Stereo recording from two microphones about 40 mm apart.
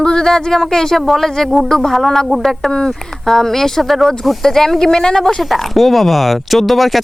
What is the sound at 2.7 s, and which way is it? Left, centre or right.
Speech, left.